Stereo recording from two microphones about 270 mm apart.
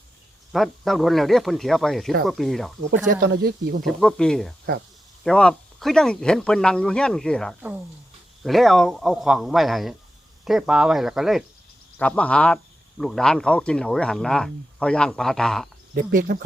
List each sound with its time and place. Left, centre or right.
0.5 s speech: centre
3.1 s speech: right
3.8 s speech: centre
16.0 s speech: right